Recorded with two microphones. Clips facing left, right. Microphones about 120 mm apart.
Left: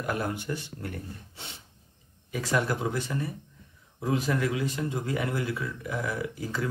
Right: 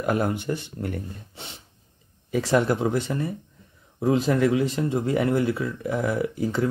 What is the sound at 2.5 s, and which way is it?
Speech, 30° right (ahead or behind).